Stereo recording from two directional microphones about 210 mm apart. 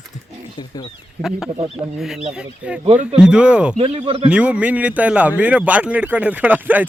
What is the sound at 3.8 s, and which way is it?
Speech, 30° right (ahead or behind).